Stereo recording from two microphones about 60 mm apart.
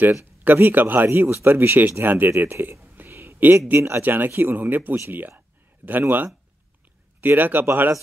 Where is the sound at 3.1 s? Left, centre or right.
Right.